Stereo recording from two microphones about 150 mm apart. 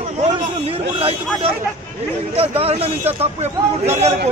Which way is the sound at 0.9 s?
40° right (ahead or behind).